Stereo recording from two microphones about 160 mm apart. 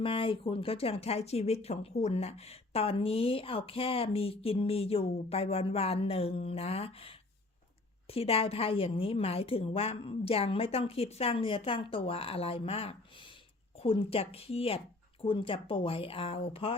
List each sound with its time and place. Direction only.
0.0 s speech: 35° left (ahead or behind)